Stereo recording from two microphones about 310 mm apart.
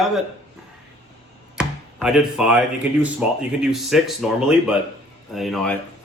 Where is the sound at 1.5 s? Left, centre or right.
Centre.